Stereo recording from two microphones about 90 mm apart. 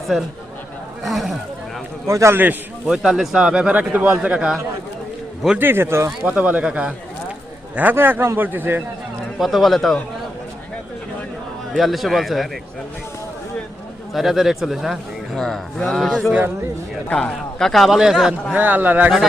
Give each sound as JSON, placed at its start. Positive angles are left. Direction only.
{"t": 1.0, "sound": "a man's voice", "side_deg": 0}
{"t": 2.0, "sound": "a man's voice", "side_deg": -30}
{"t": 2.8, "sound": "speech", "side_deg": -5}
{"t": 5.5, "sound": "a man's voice", "side_deg": -25}
{"t": 6.1, "sound": "a man's voice", "side_deg": -15}
{"t": 9.4, "sound": "a man's voice", "side_deg": 0}
{"t": 11.7, "sound": "a man's voice", "side_deg": 0}
{"t": 14.1, "sound": "a man's voice", "side_deg": 0}
{"t": 17.1, "sound": "a man's voice", "side_deg": 10}
{"t": 18.5, "sound": "a man's voice", "side_deg": -20}